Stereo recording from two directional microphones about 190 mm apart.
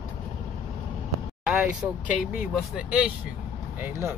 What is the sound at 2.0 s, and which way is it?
Speech, 45° left (ahead or behind).